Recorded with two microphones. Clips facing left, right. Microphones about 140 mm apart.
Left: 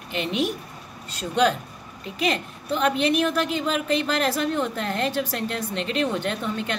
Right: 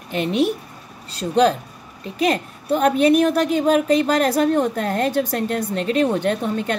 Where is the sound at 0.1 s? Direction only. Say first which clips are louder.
Right 6 dB; 40° right (ahead or behind).